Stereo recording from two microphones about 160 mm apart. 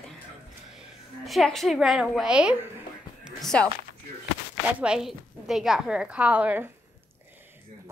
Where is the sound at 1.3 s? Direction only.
Centre (ahead or behind).